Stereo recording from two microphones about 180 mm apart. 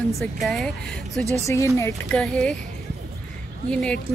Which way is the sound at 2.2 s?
5° left (ahead or behind).